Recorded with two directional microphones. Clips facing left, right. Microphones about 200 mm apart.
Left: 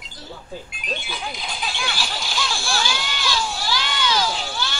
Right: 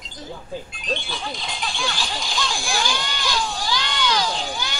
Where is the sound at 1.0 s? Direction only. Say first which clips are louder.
Right 1 dB; 5° left (ahead or behind).